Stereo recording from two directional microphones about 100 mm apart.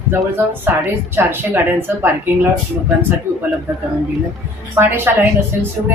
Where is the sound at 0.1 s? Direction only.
20° right (ahead or behind).